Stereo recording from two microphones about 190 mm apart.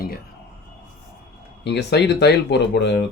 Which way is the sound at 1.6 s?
60° left (ahead or behind).